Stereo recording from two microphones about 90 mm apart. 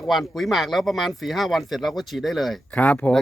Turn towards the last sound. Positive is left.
turn(degrees=15)  # may be behind; listen again after turning